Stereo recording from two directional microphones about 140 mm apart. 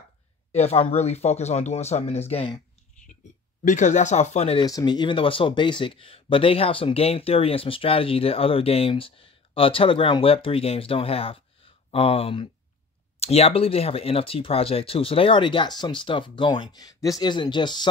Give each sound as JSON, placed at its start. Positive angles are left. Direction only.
{"t": 0.5, "sound": "speech", "side_deg": 45}
{"t": 3.1, "sound": "a sound", "side_deg": 60}
{"t": 3.6, "sound": "speech", "side_deg": 60}
{"t": 4.6, "sound": "speech", "side_deg": 30}